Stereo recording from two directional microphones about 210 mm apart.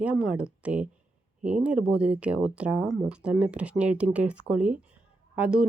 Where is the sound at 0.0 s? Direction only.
5° right (ahead or behind).